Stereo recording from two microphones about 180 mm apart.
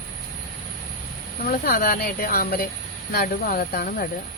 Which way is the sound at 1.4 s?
55° left (ahead or behind).